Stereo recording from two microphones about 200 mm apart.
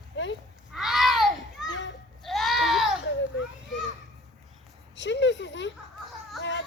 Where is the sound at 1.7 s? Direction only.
65° left (ahead or behind).